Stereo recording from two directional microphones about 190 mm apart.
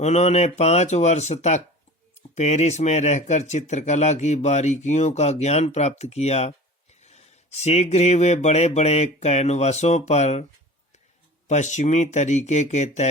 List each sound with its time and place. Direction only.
0.0 s speech: 35° left (ahead or behind)
11.4 s speech: 40° left (ahead or behind)